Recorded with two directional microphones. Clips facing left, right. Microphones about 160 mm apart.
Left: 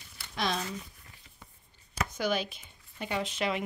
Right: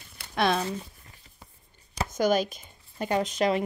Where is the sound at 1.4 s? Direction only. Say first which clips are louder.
Right 2 dB; 30° right (ahead or behind).